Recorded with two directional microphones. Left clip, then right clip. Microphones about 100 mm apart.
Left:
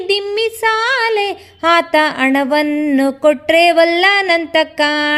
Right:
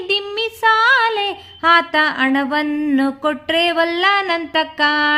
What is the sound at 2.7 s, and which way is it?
Music, 25° left (ahead or behind).